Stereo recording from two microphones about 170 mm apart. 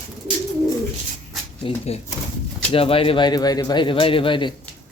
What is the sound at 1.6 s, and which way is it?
A man's voice, 35° left (ahead or behind).